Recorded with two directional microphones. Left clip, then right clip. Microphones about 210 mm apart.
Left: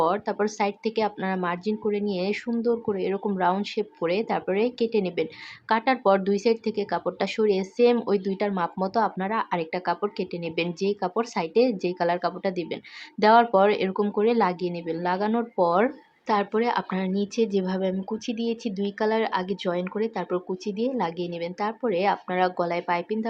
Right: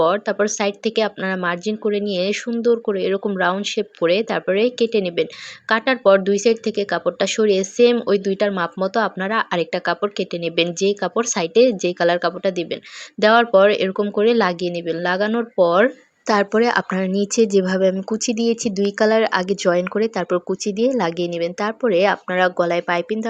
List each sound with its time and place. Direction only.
0.0 s speech: 20° right (ahead or behind)
16.3 s speech: 30° right (ahead or behind)